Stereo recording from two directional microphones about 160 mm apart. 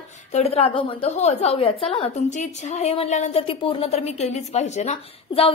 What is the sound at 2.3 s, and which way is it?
A woman's voice, 45° left (ahead or behind).